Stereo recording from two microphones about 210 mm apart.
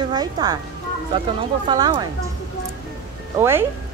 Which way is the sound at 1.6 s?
20° right (ahead or behind).